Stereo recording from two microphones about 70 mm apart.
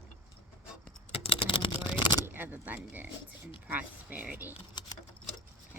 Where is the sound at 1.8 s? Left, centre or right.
Left.